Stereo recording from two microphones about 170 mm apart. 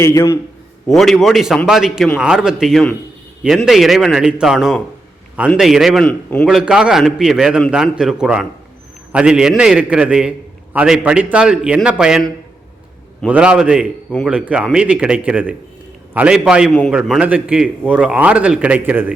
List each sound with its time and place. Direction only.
0.0 s a man's voice: 15° left (ahead or behind)
0.9 s a man's voice: centre (ahead or behind)